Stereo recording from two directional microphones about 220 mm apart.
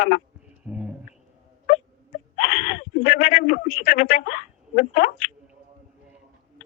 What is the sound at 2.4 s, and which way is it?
Speech, 35° left (ahead or behind).